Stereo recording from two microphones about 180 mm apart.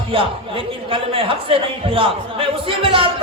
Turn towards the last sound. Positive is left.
turn(degrees=-30)  # may be behind; listen again after turning